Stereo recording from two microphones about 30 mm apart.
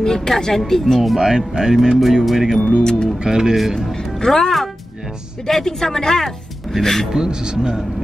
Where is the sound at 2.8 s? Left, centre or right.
Left.